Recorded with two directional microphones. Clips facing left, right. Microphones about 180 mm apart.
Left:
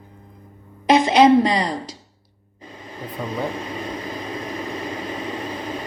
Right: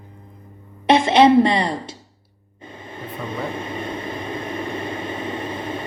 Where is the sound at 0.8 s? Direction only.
30° right (ahead or behind).